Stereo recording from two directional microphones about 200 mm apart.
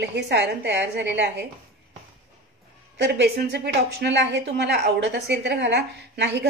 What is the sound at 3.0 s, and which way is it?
A woman's voice, 55° right (ahead or behind).